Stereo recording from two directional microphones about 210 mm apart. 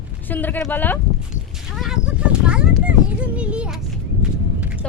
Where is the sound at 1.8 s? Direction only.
Centre (ahead or behind).